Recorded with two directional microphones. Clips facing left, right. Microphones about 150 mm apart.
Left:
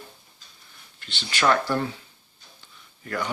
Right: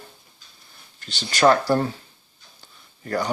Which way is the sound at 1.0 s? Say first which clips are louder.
Right 6 dB; 40° right (ahead or behind).